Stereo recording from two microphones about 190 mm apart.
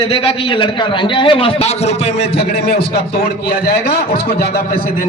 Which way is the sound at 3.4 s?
55° left (ahead or behind).